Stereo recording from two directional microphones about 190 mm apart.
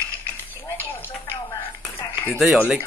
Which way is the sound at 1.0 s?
10° left (ahead or behind).